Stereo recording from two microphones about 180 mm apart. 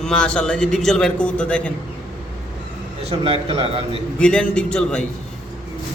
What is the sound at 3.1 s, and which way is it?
Speech, 30° right (ahead or behind).